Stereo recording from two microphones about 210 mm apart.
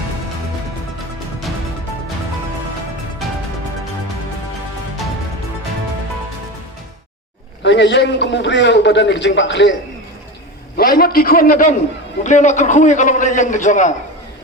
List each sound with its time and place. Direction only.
7.6 s a man's voice: 55° left (ahead or behind)
10.8 s a man's voice: 45° left (ahead or behind)